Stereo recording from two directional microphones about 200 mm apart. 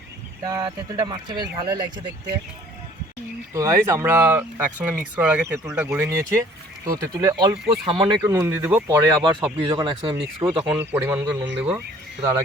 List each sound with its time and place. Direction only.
0.4 s speech: 20° right (ahead or behind)
3.5 s speech: 15° right (ahead or behind)
10.7 s speech: 10° right (ahead or behind)